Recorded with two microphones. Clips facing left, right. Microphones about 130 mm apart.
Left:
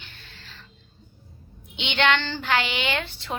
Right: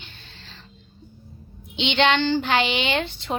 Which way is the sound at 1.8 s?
20° right (ahead or behind).